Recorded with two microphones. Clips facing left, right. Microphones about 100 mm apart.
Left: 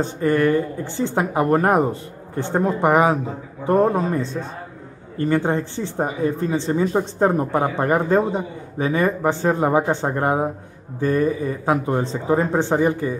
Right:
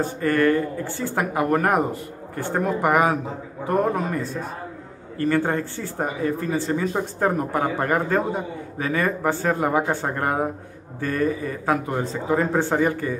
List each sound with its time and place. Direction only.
0.0 s a man's voice: 20° left (ahead or behind)